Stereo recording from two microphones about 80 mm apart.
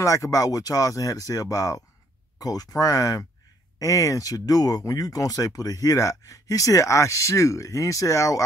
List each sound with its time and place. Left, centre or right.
0.0 s speech: left